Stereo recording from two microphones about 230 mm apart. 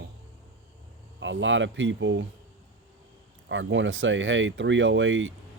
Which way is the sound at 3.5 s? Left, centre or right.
Right.